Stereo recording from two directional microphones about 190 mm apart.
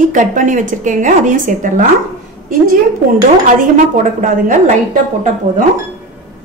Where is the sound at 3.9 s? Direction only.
45° right (ahead or behind).